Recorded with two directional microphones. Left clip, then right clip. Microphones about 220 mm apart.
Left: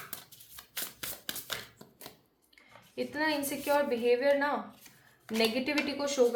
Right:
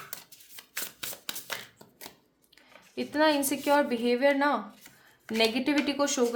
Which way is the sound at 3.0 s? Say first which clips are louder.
Right 6 dB; 50° right (ahead or behind).